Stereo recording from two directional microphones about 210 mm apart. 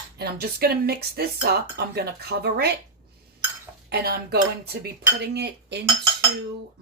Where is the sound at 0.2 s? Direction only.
50° right (ahead or behind).